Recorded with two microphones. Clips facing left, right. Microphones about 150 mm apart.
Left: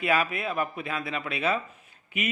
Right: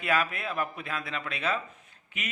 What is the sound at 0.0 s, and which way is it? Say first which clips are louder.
Speech: left 3 dB; 5° left (ahead or behind).